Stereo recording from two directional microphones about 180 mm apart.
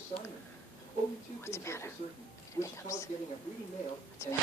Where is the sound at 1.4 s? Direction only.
15° left (ahead or behind).